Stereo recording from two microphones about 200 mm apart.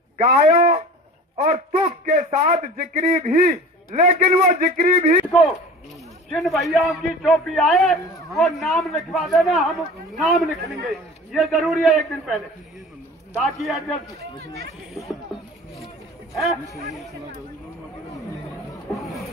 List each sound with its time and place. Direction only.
0.2 s a man's voice: 40° right (ahead or behind)
6.2 s a man's voice: centre (ahead or behind)
16.3 s a man's voice: centre (ahead or behind)
18.9 s a sound: centre (ahead or behind)